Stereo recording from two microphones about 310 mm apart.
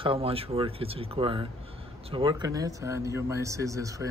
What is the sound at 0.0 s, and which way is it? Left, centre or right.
Speech, centre.